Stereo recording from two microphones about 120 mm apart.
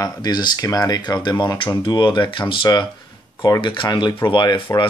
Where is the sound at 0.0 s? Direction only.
35° left (ahead or behind).